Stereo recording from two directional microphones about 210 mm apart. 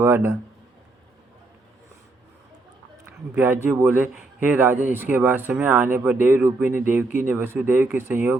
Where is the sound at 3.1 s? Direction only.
10° right (ahead or behind).